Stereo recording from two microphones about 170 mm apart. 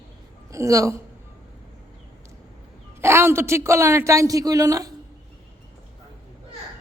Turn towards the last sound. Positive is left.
turn(degrees=-20)  # may be behind; listen again after turning